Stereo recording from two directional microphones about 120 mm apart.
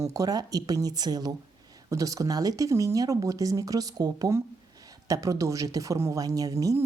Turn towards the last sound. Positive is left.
turn(degrees=-30)  # may be behind; listen again after turning